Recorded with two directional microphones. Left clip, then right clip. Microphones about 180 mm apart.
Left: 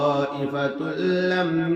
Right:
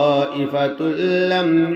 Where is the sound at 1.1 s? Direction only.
30° right (ahead or behind).